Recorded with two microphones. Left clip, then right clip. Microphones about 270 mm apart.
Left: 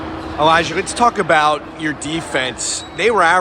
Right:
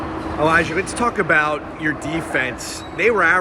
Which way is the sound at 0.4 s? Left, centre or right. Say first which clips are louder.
Left 3 dB; centre.